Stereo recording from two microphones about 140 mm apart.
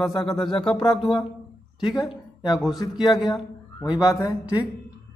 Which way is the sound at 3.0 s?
Centre (ahead or behind).